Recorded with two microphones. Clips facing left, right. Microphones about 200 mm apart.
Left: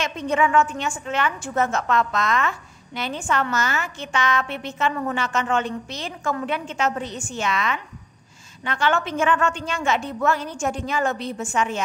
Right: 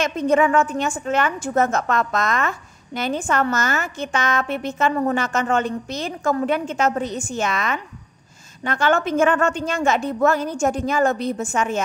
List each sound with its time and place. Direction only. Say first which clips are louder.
0.0 s a woman's voice: right 5 dB; 45° right (ahead or behind)